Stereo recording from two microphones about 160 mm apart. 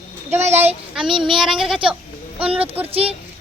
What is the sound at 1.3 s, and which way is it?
Speech, 5° right (ahead or behind).